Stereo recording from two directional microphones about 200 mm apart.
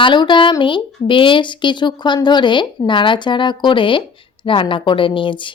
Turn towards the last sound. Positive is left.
turn(degrees=25)  # may be behind; listen again after turning